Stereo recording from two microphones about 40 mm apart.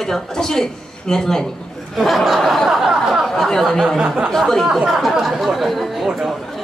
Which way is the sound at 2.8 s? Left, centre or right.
Centre.